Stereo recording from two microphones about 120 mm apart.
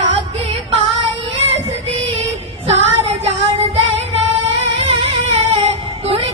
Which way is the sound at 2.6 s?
60° right (ahead or behind).